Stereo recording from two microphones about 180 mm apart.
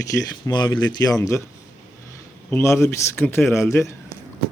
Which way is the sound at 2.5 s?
15° left (ahead or behind).